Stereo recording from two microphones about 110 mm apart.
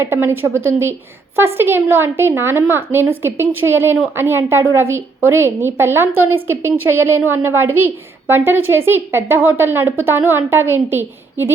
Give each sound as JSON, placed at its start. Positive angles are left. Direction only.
{"t": 0.0, "sound": "a woman's voice", "side_deg": -20}